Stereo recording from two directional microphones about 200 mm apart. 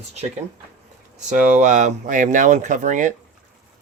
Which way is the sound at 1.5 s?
40° right (ahead or behind).